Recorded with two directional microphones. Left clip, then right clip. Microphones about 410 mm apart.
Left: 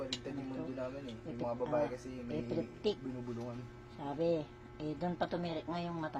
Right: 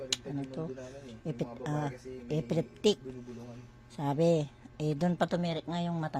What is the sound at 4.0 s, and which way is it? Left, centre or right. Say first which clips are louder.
Speech: right 7 dB; right.